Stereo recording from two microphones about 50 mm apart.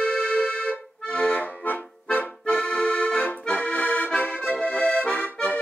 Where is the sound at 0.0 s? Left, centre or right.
Centre.